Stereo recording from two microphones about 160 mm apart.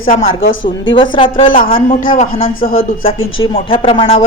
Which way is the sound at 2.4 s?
35° left (ahead or behind).